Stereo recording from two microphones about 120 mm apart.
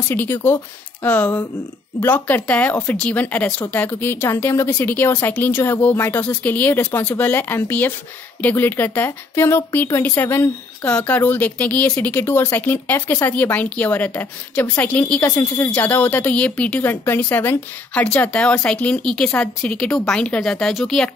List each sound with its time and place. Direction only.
0.1 s speech: 20° left (ahead or behind)